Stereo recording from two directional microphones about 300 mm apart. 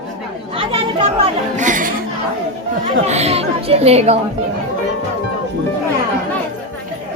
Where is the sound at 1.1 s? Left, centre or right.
Right.